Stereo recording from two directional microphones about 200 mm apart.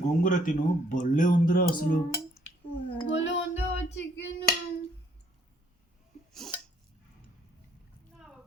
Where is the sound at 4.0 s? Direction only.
60° left (ahead or behind).